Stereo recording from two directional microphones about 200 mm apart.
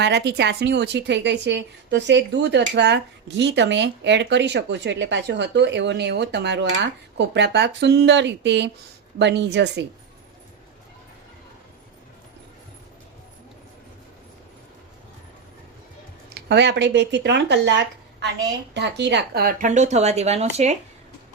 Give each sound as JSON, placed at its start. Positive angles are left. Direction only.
{"t": 0.0, "sound": "a woman's voice", "side_deg": -55}
{"t": 16.3, "sound": "speech", "side_deg": -55}